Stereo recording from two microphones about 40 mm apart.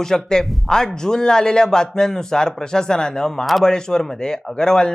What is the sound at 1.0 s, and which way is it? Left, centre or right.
Speech, centre.